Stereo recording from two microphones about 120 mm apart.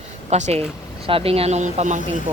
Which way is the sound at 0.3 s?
70° right (ahead or behind).